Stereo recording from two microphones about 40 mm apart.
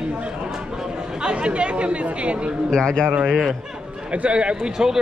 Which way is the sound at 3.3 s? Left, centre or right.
Centre.